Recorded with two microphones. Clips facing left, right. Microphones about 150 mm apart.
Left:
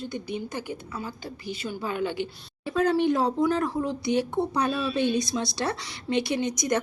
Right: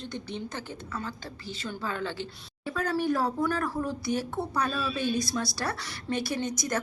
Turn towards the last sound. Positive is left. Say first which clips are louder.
# left 4 dB
turn(degrees=20)  # may be behind; listen again after turning